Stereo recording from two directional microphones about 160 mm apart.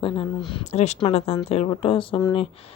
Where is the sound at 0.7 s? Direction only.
45° left (ahead or behind).